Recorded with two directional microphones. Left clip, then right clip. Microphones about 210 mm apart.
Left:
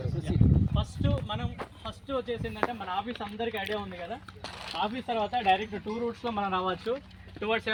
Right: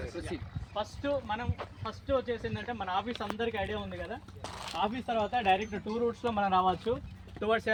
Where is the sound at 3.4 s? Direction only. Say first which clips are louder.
Left 3 dB; 30° left (ahead or behind).